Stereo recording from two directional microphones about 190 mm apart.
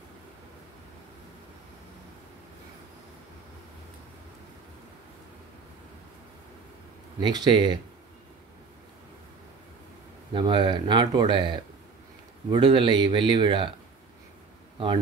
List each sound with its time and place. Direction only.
7.2 s speech: 25° right (ahead or behind)
10.3 s speech: 25° right (ahead or behind)